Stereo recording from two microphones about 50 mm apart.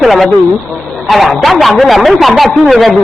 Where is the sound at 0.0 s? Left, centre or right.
Centre.